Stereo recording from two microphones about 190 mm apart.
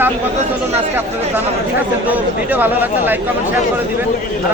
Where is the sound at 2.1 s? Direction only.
10° right (ahead or behind).